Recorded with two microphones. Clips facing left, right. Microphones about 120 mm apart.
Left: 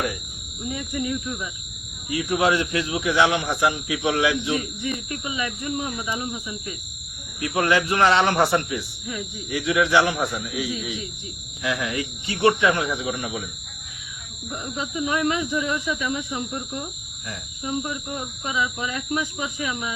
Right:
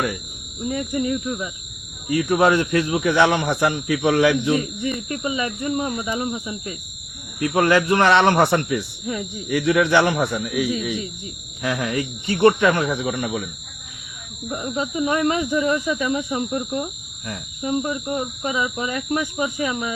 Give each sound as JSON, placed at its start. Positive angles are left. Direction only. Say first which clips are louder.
{"t": 0.7, "sound": "speech", "louder": "right 5 dB", "side_deg": -40}
{"t": 2.0, "sound": "speech", "louder": "right 4 dB", "side_deg": -50}
{"t": 4.9, "sound": "speech", "louder": "right 4 dB", "side_deg": -35}
{"t": 7.4, "sound": "speech", "louder": "right 4 dB", "side_deg": -55}
{"t": 9.0, "sound": "speech", "louder": "right 5 dB", "side_deg": -40}
{"t": 9.6, "sound": "speech", "louder": "right 3 dB", "side_deg": -55}
{"t": 14.8, "sound": "speech", "louder": "right 3 dB", "side_deg": -40}